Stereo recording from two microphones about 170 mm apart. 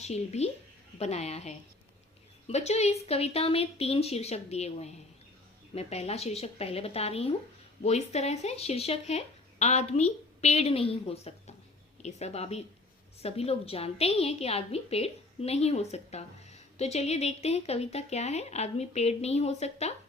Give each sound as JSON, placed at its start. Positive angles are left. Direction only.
{"t": 0.0, "sound": "a woman's voice", "side_deg": 40}